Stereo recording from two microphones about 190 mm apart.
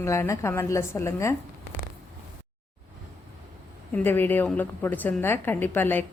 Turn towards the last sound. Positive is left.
turn(degrees=10)  # may be behind; listen again after turning